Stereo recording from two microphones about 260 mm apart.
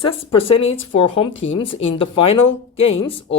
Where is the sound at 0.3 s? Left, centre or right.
Left.